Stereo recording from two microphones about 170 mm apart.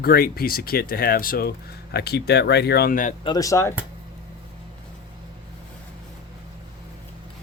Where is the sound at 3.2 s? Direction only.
20° left (ahead or behind).